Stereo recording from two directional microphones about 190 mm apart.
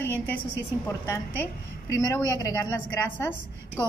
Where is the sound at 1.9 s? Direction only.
15° left (ahead or behind).